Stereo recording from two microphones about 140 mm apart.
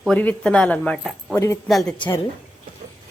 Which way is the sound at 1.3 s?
20° left (ahead or behind).